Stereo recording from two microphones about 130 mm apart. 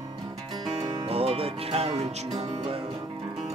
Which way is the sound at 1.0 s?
50° right (ahead or behind).